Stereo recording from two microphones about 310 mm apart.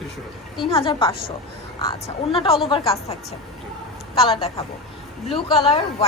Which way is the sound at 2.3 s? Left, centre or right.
Centre.